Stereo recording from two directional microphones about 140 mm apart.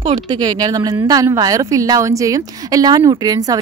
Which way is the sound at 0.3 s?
30° right (ahead or behind).